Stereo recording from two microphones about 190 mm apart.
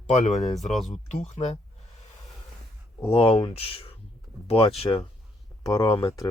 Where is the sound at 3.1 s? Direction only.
30° left (ahead or behind).